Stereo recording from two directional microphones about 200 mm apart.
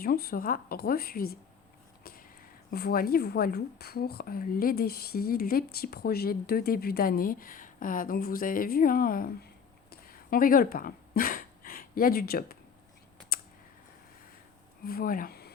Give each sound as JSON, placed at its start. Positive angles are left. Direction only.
{"t": 0.0, "sound": "speech", "side_deg": 50}
{"t": 2.6, "sound": "speech", "side_deg": 50}
{"t": 9.9, "sound": "a sound", "side_deg": 50}
{"t": 14.8, "sound": "speech", "side_deg": 45}